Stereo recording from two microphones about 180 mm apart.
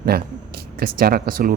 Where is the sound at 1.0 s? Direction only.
55° right (ahead or behind).